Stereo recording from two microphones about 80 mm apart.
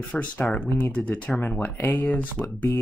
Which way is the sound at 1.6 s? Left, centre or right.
Left.